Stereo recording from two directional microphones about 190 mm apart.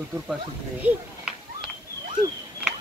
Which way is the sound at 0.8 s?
10° right (ahead or behind).